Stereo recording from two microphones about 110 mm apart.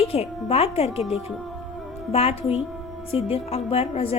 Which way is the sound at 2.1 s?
65° left (ahead or behind).